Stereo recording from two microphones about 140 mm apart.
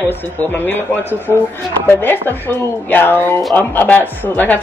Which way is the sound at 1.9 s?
15° left (ahead or behind).